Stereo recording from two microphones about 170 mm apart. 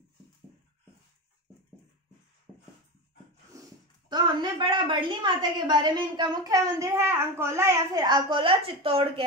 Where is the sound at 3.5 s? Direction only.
20° right (ahead or behind).